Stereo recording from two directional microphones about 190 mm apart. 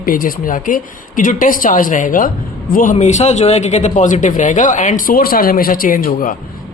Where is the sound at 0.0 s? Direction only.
50° left (ahead or behind).